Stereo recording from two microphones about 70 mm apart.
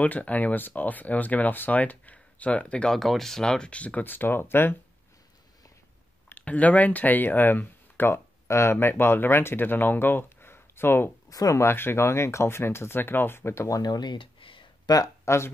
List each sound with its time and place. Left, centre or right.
0.0 s speech: left
3.0 s speech: centre; by 4.7 s left
6.2 s speech: left
8.5 s speech: left
11.2 s speech: left
11.6 s speech: left
13.7 s speech: left
14.9 s speech: left
15.2 s speech: left